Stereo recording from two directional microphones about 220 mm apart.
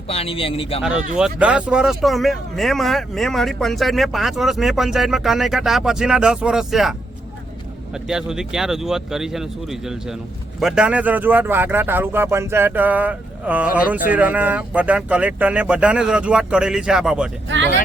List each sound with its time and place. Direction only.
0.1 s a man's voice: 25° left (ahead or behind)
0.8 s speech: 5° right (ahead or behind)
8.0 s speech: centre (ahead or behind)